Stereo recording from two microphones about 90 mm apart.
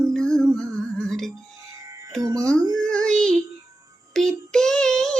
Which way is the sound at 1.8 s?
35° right (ahead or behind).